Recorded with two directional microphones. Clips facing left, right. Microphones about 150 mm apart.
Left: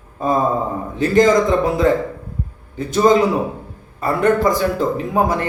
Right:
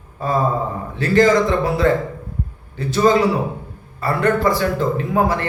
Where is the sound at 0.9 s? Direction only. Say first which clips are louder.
Left 1 dB; 20° left (ahead or behind).